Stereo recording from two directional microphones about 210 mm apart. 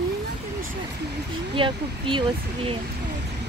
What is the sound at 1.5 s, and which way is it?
Speech, 25° right (ahead or behind).